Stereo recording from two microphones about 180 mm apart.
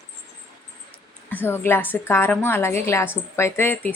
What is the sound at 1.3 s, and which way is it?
A woman's voice, 10° left (ahead or behind).